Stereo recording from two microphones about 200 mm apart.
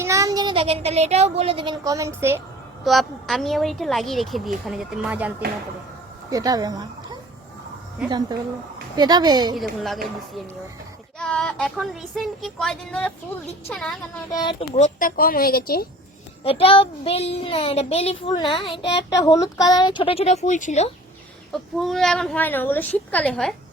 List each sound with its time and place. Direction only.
0.0 s speech: 15° right (ahead or behind)
2.8 s a woman's voice: centre (ahead or behind)
6.3 s speech: 20° right (ahead or behind)
9.0 s speech: 20° right (ahead or behind)
11.2 s a woman's voice: 5° left (ahead or behind)
14.3 s a child's voice: 20° left (ahead or behind)
14.8 s speech: 40° left (ahead or behind)
16.4 s a child's voice: 30° left (ahead or behind)
21.5 s a woman's voice: centre (ahead or behind)